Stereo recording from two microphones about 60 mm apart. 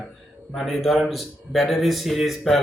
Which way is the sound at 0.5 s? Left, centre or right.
Centre.